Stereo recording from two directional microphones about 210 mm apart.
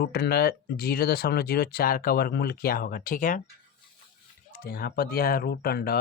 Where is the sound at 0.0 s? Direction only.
45° left (ahead or behind).